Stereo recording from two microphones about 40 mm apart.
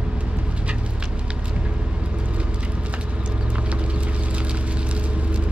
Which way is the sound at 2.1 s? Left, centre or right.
Right.